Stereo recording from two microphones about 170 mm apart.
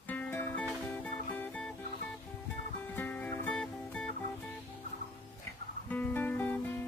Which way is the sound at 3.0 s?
10° left (ahead or behind).